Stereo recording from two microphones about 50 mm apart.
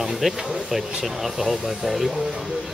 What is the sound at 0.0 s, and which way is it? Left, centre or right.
Speech, centre.